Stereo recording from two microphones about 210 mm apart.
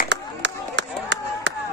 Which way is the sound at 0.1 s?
55° right (ahead or behind).